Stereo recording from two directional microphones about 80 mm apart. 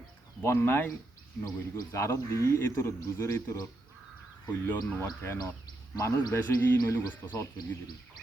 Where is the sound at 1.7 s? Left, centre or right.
Left.